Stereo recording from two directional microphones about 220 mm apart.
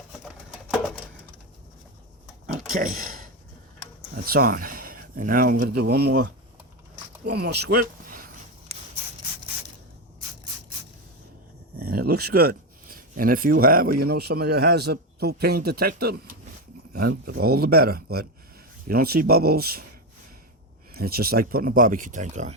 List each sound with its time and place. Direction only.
2.7 s speech: 40° right (ahead or behind)
4.3 s speech: 40° right (ahead or behind)
7.3 s speech: 50° right (ahead or behind)
11.8 s speech: 45° right (ahead or behind)
20.9 s speech: 45° right (ahead or behind)